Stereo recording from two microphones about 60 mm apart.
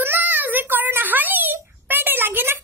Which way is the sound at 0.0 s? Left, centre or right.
Right.